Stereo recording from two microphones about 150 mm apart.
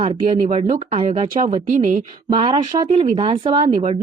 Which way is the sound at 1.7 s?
60° right (ahead or behind).